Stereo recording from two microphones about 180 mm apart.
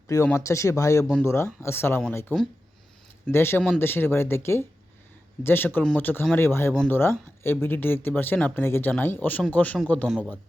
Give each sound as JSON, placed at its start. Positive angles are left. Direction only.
{"t": 0.1, "sound": "speech", "side_deg": 15}